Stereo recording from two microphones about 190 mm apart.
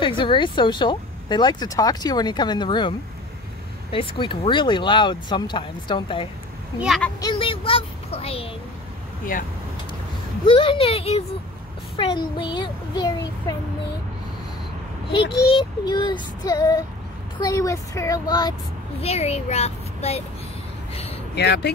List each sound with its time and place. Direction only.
0.0 s speech: 25° left (ahead or behind)
3.9 s speech: 25° left (ahead or behind)
6.8 s a child's voice: centre (ahead or behind)
7.2 s a sound: 25° left (ahead or behind)
9.3 s speech: 45° left (ahead or behind)
10.4 s speech: 25° left (ahead or behind)
15.4 s speech: 25° left (ahead or behind)
18.9 s speech: 35° left (ahead or behind)
21.4 s speech: 60° left (ahead or behind)